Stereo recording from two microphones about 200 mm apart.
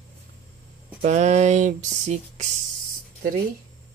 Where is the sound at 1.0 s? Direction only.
35° right (ahead or behind).